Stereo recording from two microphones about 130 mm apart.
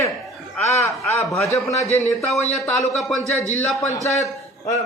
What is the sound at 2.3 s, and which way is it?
Speech, centre (ahead or behind).